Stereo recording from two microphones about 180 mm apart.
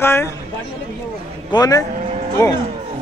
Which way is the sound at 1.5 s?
20° left (ahead or behind).